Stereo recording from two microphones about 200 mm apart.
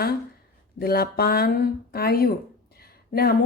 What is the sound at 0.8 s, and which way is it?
Speech, 50° left (ahead or behind).